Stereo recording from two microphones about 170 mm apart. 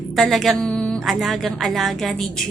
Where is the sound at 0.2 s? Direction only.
Centre (ahead or behind).